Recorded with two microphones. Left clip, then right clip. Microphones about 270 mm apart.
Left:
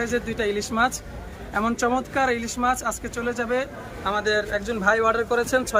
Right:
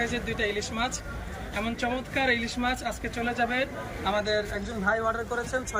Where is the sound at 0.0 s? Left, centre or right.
Centre.